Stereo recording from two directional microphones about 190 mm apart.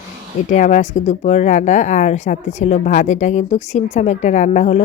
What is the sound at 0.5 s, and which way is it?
Speech, 40° left (ahead or behind).